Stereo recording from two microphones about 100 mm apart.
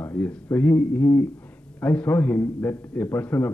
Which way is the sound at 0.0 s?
15° left (ahead or behind).